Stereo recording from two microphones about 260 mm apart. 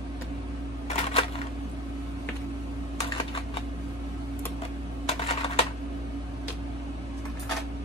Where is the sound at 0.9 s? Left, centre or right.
Left.